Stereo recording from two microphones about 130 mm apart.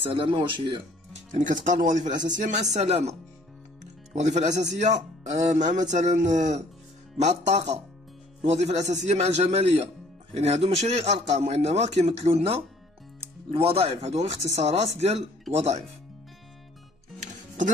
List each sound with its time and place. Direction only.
0.1 s speech: 40° right (ahead or behind)
1.3 s a man's voice: 75° right (ahead or behind); by 15.8 s 55° right (ahead or behind)